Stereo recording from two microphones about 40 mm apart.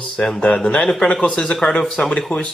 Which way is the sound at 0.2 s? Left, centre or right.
Left.